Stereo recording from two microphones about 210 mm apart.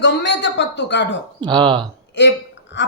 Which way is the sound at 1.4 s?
20° right (ahead or behind).